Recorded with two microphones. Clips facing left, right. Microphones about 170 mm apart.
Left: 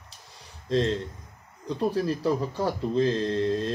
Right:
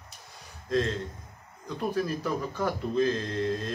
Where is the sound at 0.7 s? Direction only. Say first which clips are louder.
Left 3 dB; 30° left (ahead or behind).